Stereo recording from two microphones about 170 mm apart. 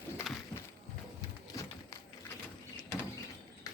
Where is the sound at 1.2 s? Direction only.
20° left (ahead or behind).